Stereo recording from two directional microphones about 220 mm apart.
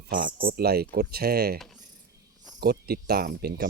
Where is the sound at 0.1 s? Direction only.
40° right (ahead or behind).